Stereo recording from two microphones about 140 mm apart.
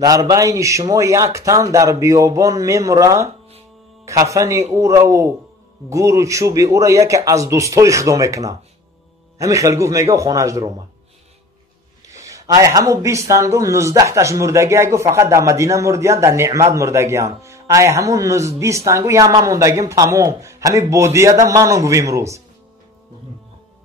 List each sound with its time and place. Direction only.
0.0 s speech: 25° right (ahead or behind)
12.1 s speech: 25° right (ahead or behind)